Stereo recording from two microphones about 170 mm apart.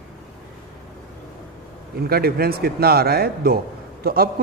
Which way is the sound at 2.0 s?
65° right (ahead or behind).